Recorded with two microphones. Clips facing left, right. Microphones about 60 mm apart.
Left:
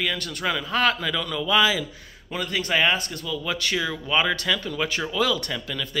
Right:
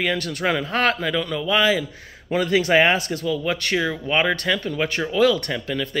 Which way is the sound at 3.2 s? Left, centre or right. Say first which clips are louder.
Right 5 dB; right.